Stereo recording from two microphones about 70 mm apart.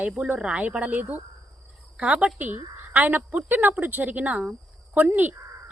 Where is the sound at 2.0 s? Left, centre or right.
Centre.